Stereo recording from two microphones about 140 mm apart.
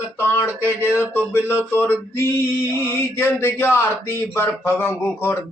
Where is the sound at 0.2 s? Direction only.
15° left (ahead or behind).